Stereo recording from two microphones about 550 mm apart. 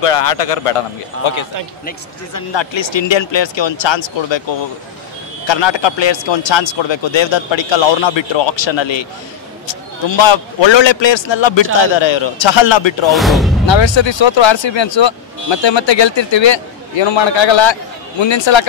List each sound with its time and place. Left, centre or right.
0.0 s a man's voice: left
2.5 s speech: left
13.1 s speech: centre
13.7 s speech: left